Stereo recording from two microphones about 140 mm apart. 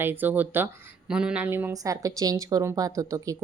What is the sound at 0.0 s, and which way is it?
A woman's voice, 15° right (ahead or behind).